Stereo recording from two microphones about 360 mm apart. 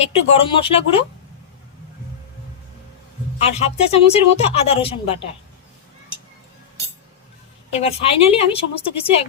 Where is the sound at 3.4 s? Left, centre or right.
Centre.